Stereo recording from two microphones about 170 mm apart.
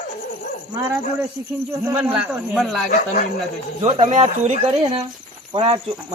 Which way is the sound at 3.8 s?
35° right (ahead or behind).